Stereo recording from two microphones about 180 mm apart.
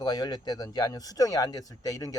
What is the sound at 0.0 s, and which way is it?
Speech, 20° left (ahead or behind).